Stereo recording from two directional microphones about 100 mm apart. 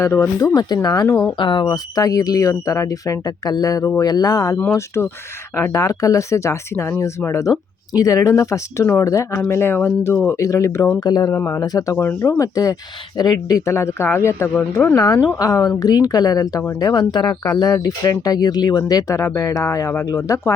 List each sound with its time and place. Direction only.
0.0 s speech: 30° left (ahead or behind)
1.4 s speech: 50° left (ahead or behind); by 4.6 s 35° left (ahead or behind)
4.9 s speech: 25° left (ahead or behind)
11.0 s speech: 45° left (ahead or behind)
11.3 s speech: 25° left (ahead or behind)
11.6 s speech: 40° left (ahead or behind)
14.9 s speech: 35° left (ahead or behind)
16.9 s speech: 50° left (ahead or behind)
17.6 s speech: 40° left (ahead or behind)